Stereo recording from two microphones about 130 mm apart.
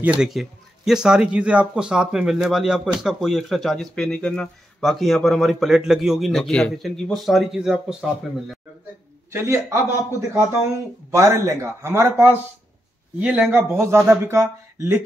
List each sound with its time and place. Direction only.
0.0 s speech: 5° right (ahead or behind)
9.3 s speech: 20° right (ahead or behind)
11.1 s speech: 20° right (ahead or behind)
13.7 s speech: 20° right (ahead or behind)